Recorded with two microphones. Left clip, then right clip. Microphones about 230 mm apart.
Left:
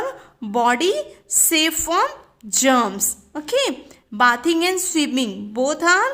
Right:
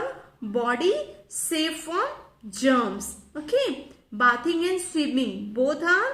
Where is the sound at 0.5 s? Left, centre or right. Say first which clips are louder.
Left 6 dB; left.